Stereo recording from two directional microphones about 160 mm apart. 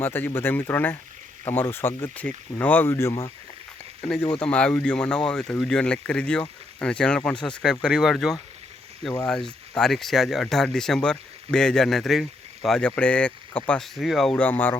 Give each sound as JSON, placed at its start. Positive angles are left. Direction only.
{"t": 0.0, "sound": "speech", "side_deg": 15}